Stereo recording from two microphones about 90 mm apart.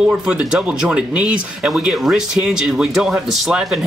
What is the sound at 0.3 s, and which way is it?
Speech, 10° right (ahead or behind).